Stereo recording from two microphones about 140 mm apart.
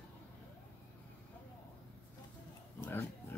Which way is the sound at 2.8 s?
15° left (ahead or behind).